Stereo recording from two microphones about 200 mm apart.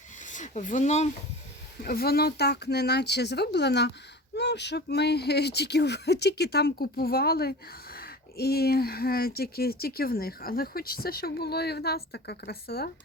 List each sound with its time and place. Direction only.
0.3 s speech: 40° left (ahead or behind)
1.8 s speech: 50° left (ahead or behind)